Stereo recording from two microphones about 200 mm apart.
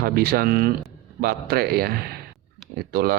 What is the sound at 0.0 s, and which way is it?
Speech, 50° right (ahead or behind).